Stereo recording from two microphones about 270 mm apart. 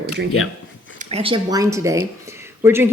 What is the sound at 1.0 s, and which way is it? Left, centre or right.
Speech, right.